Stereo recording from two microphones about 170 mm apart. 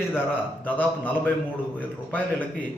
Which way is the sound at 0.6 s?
10° left (ahead or behind).